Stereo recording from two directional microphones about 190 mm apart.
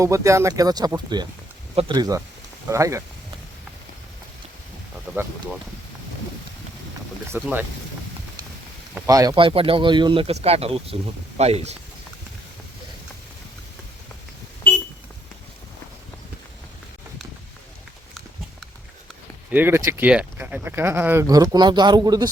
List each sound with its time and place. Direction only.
0.0 s speech: 15° right (ahead or behind)
7.3 s speech: 10° right (ahead or behind)
9.0 s speech: 20° right (ahead or behind); by 11.8 s 35° right (ahead or behind)
19.5 s speech: 10° right (ahead or behind)